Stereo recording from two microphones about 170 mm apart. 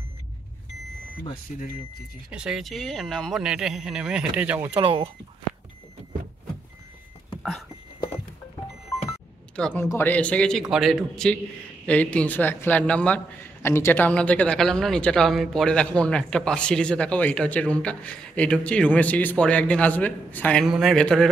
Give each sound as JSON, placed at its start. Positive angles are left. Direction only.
{"t": 2.3, "sound": "speech", "side_deg": -5}
{"t": 4.7, "sound": "speech", "side_deg": -30}
{"t": 9.6, "sound": "a man's voice", "side_deg": 5}